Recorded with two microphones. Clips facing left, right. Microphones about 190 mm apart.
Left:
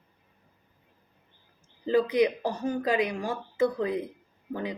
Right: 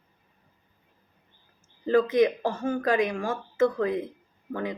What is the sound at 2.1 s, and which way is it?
Speech, 15° left (ahead or behind).